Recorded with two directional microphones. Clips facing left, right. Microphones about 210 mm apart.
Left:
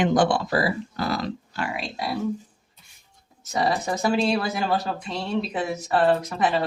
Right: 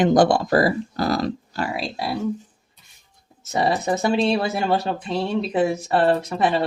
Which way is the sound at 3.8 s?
25° right (ahead or behind).